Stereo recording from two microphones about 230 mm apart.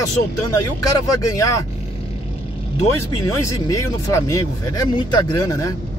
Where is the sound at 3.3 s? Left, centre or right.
Centre.